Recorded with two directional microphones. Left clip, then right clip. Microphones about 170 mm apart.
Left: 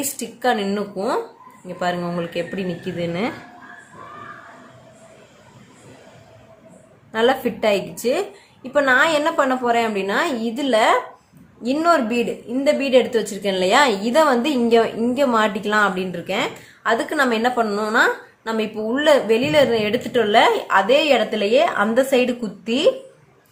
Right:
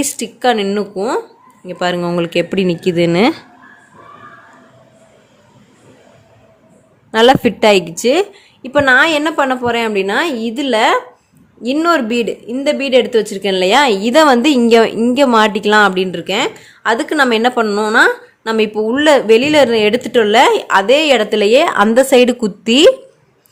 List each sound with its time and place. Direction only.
0.2 s a woman's voice: 65° right (ahead or behind); by 3.3 s 90° right
7.1 s a woman's voice: 70° right (ahead or behind); by 22.9 s 90° right